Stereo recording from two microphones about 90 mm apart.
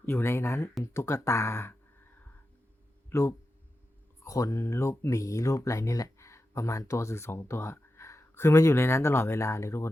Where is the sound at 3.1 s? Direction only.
30° left (ahead or behind).